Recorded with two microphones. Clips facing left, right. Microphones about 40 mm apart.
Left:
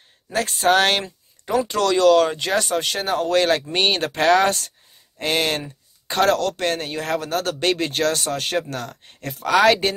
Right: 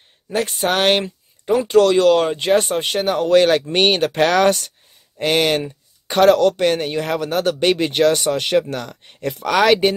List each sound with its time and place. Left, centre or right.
0.3 s speech: right